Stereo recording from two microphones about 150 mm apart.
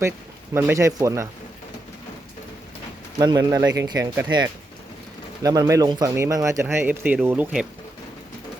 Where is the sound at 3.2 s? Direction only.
25° right (ahead or behind).